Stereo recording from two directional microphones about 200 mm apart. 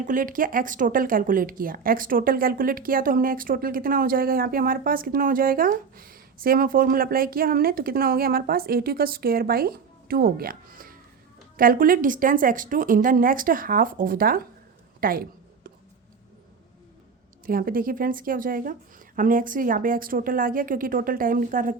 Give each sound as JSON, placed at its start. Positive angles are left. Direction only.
{"t": 0.0, "sound": "speech", "side_deg": -40}
{"t": 17.4, "sound": "speech", "side_deg": -45}